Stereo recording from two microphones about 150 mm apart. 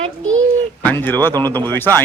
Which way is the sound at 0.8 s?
15° left (ahead or behind).